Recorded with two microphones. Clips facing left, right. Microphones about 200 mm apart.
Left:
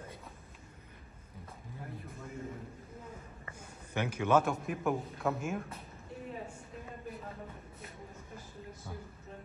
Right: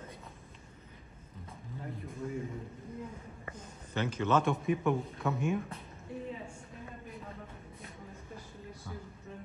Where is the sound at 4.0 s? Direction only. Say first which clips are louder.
Left 1 dB; 10° left (ahead or behind).